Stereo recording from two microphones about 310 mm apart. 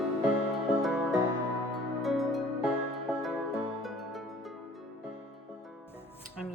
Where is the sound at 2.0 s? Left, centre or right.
Centre.